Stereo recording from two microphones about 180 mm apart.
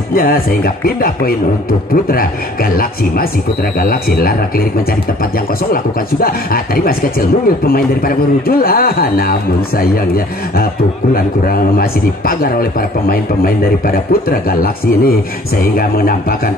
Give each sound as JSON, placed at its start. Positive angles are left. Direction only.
{"t": 0.1, "sound": "speech", "side_deg": 50}
{"t": 6.2, "sound": "speech", "side_deg": 55}